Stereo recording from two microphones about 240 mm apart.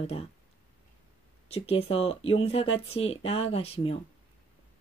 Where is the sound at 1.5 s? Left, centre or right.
Left.